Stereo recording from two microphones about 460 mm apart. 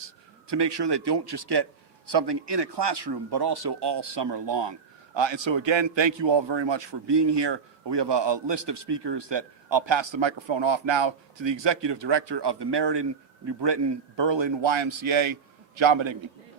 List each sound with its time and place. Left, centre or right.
0.4 s a man's voice: right